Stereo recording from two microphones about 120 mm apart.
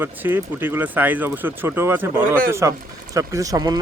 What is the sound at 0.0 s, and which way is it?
Speech, 15° right (ahead or behind).